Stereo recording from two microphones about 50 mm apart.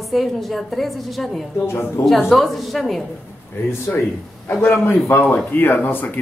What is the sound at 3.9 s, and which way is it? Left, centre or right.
Speech, left.